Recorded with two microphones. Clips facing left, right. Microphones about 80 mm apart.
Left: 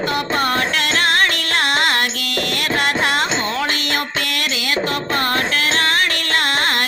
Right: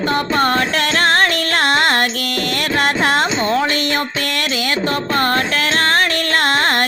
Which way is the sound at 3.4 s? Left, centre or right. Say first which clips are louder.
Right 5 dB; right.